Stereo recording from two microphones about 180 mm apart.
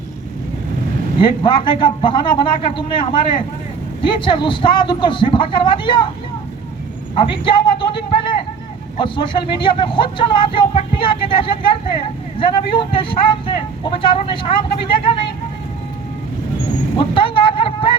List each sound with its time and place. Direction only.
1.2 s speech: 25° left (ahead or behind)
4.0 s speech: 25° left (ahead or behind)
7.2 s a man's voice: 30° left (ahead or behind)
17.0 s a sound: 30° left (ahead or behind)